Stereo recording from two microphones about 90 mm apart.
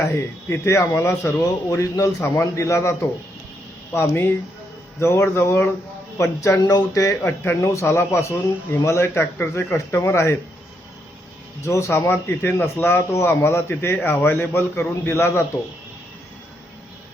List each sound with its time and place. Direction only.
0.0 s a man's voice: 25° left (ahead or behind)
11.6 s speech: 35° left (ahead or behind)